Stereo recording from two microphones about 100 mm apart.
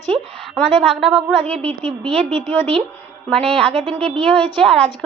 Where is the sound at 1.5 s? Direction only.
90° right.